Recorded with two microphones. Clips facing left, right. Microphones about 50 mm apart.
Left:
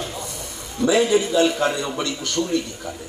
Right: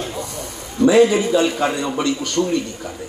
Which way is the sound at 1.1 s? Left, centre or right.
Centre.